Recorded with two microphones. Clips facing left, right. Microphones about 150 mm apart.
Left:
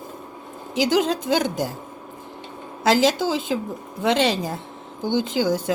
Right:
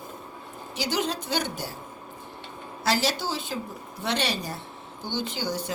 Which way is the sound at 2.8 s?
90° left.